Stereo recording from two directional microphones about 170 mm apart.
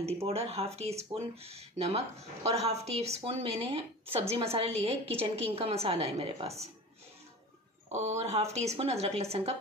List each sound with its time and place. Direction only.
0.0 s a woman's voice: 35° right (ahead or behind)
7.9 s a woman's voice: 40° right (ahead or behind)